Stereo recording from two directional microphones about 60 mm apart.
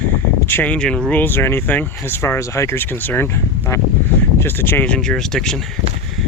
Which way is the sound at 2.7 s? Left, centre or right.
Left.